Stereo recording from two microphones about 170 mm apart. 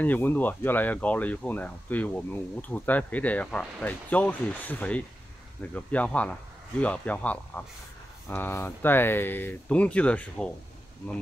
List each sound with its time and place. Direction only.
0.0 s speech: 10° left (ahead or behind)